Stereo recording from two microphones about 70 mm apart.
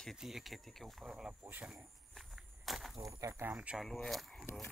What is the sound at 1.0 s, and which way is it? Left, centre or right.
Speech, centre.